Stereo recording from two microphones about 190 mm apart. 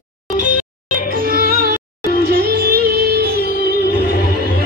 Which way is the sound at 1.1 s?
50° right (ahead or behind).